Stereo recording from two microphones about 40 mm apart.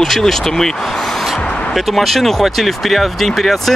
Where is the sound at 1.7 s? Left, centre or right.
Centre.